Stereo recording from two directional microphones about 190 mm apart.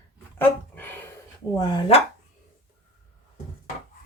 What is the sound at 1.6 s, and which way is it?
Speech, 25° left (ahead or behind).